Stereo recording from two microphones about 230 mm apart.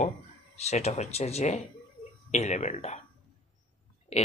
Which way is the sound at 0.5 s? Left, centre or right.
Left.